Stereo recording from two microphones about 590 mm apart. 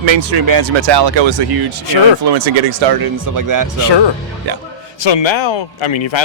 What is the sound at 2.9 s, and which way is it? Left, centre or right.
Speech, right.